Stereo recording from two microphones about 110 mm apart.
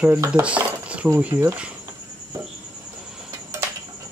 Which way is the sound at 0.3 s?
10° right (ahead or behind).